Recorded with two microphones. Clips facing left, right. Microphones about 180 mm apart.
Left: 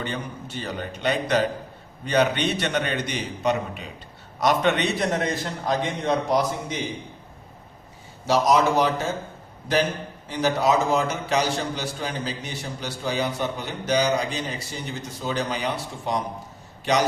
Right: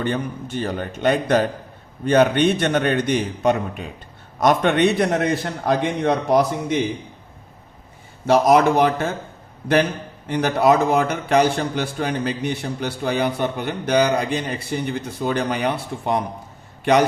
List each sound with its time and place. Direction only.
0.0 s a man's voice: 50° right (ahead or behind)
8.3 s a man's voice: 55° right (ahead or behind)
10.2 s a man's voice: 60° right (ahead or behind)